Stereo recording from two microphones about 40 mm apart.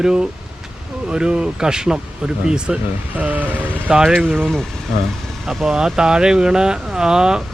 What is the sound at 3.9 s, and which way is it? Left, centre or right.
Speech, centre.